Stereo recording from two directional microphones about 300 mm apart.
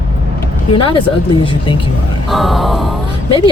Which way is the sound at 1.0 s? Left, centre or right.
Centre.